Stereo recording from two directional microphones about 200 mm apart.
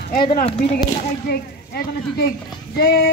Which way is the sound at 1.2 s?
50° left (ahead or behind).